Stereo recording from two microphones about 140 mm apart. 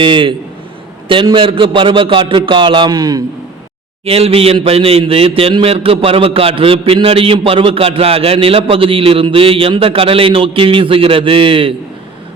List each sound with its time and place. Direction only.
0.0 s a man's voice: 35° right (ahead or behind)
4.0 s a man's voice: 45° right (ahead or behind)